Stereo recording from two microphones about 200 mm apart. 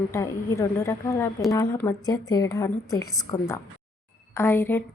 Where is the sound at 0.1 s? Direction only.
15° left (ahead or behind).